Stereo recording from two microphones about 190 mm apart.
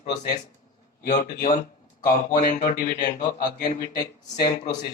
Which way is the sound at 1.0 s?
45° left (ahead or behind).